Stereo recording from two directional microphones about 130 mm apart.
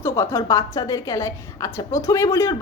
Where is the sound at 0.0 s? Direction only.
20° left (ahead or behind).